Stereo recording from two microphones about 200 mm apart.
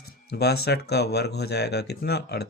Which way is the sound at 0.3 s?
55° left (ahead or behind).